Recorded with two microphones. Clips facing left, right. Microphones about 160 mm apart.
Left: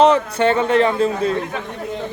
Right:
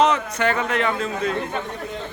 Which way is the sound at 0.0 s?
30° left (ahead or behind).